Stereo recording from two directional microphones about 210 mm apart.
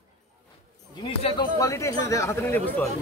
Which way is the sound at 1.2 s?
25° left (ahead or behind).